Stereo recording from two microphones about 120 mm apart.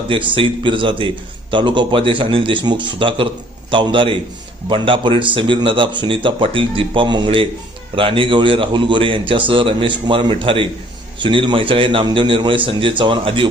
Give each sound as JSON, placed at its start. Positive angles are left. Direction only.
{"t": 0.1, "sound": "a man's voice", "side_deg": -45}